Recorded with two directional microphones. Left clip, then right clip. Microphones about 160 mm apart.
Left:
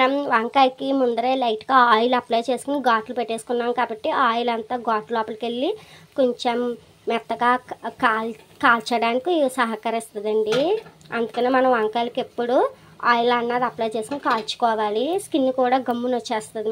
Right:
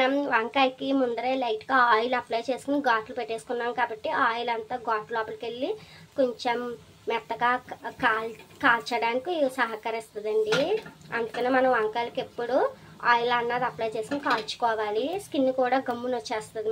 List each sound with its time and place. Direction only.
0.0 s a woman's voice: 35° left (ahead or behind)